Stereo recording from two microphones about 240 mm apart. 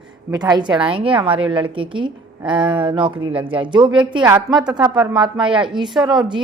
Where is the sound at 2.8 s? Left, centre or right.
Right.